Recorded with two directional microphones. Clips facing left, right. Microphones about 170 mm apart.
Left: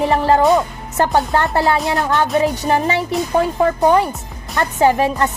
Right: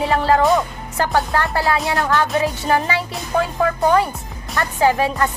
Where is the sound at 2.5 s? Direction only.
20° left (ahead or behind).